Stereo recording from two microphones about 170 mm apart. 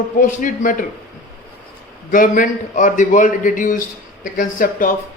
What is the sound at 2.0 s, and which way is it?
A man's voice, 50° left (ahead or behind).